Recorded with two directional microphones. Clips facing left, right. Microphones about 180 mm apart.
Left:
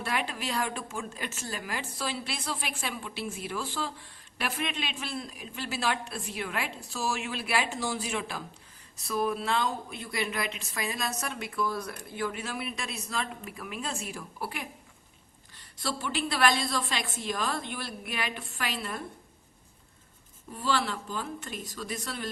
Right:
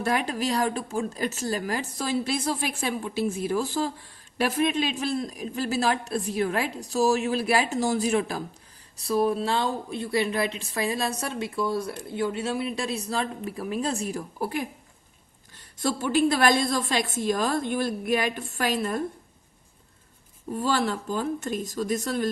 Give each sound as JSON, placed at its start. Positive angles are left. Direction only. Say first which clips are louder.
{"t": 0.0, "sound": "a woman's voice", "louder": "right 7 dB", "side_deg": -40}
{"t": 20.5, "sound": "a woman's voice", "louder": "right 5 dB", "side_deg": -45}